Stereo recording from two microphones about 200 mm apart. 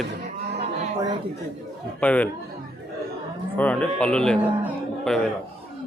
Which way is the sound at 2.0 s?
5° left (ahead or behind).